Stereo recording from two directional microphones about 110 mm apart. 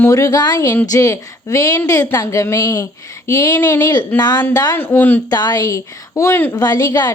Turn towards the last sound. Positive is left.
turn(degrees=35)  # may be behind; listen again after turning